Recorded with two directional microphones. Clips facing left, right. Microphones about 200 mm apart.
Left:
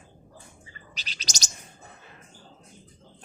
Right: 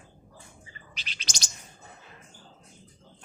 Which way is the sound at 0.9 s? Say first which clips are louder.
Left 2 dB; 40° left (ahead or behind).